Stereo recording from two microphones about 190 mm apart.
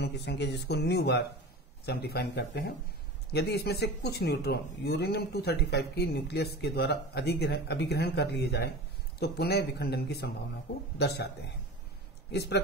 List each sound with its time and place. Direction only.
0.0 s speech: 65° left (ahead or behind)